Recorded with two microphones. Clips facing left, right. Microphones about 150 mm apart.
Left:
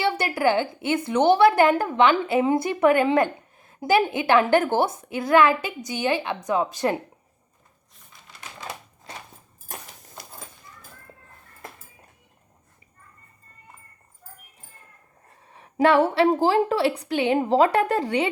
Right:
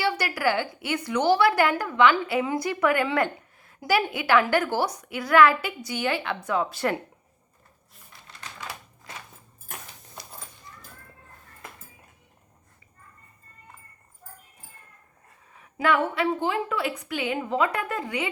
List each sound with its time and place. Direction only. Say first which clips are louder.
0.0 s a woman's voice: left 3 dB; 25° left (ahead or behind)
15.4 s a sound: left 5 dB; 30° left (ahead or behind)
16.0 s a woman's voice: left 6 dB; 35° left (ahead or behind)